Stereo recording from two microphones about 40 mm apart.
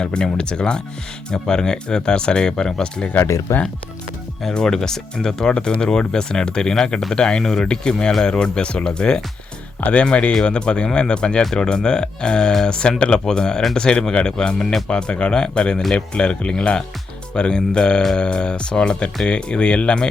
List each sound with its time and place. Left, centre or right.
0.0 s speech: left
4.5 s speech: centre
9.8 s speech: left